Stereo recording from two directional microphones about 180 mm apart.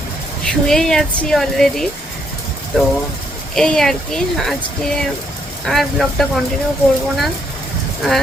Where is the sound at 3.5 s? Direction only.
Centre (ahead or behind).